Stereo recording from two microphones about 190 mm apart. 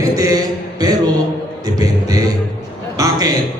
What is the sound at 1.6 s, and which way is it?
Music, 20° right (ahead or behind).